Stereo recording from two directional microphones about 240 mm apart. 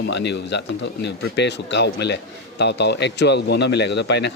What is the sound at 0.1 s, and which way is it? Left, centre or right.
A man's voice, left.